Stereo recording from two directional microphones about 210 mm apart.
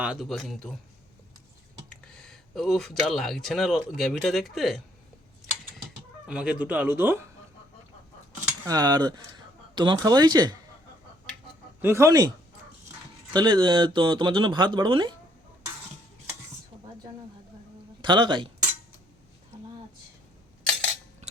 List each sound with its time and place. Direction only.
0.0 s speech: centre (ahead or behind)
2.1 s speech: 5° left (ahead or behind)
6.2 s speech: 5° right (ahead or behind)
8.6 s speech: 20° right (ahead or behind)
11.8 s speech: 10° right (ahead or behind)
13.3 s speech: 20° right (ahead or behind)
18.0 s speech: 20° right (ahead or behind)